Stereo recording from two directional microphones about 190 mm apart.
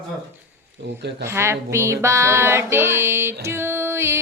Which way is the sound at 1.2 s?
15° right (ahead or behind).